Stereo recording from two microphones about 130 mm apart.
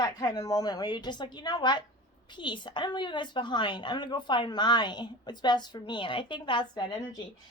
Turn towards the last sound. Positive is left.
turn(degrees=35)  # may be behind; listen again after turning